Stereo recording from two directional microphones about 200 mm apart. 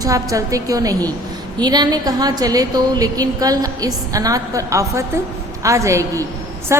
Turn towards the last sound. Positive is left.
turn(degrees=-15)  # may be behind; listen again after turning